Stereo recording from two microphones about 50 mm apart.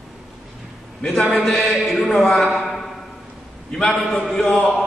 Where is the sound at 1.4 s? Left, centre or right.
Centre.